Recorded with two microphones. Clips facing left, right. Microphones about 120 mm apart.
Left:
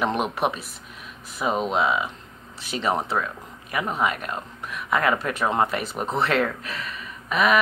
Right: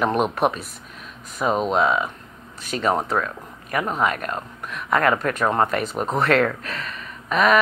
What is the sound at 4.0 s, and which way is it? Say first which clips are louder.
Speech: right 2 dB; 50° right (ahead or behind).